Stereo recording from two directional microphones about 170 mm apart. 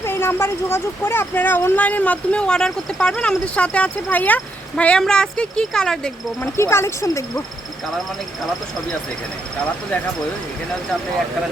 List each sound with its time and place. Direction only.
0.0 s speech: 15° left (ahead or behind)
6.4 s speech: 15° left (ahead or behind)